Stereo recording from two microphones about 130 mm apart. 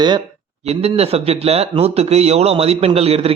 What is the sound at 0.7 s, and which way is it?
A man's voice, 55° right (ahead or behind).